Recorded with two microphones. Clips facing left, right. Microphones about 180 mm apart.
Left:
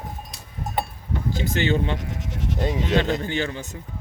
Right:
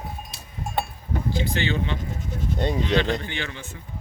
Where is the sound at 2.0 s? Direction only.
85° left.